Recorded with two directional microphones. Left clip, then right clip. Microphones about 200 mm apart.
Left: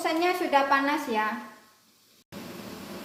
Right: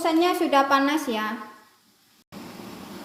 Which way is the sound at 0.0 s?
30° right (ahead or behind).